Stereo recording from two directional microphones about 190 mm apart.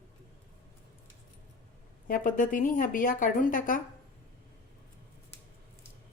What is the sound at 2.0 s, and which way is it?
Speech, 45° left (ahead or behind).